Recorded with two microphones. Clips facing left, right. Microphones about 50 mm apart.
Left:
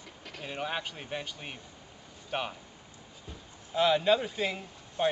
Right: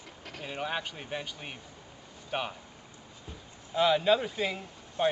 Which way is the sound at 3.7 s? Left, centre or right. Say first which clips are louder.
Even; centre.